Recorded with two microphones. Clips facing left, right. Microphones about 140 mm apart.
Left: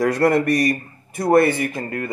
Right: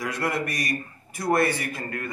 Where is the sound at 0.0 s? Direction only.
60° left (ahead or behind).